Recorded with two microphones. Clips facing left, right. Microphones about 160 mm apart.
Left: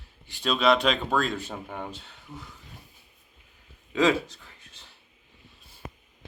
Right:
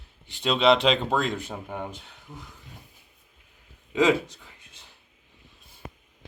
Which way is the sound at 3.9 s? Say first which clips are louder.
Right 1 dB; 20° right (ahead or behind).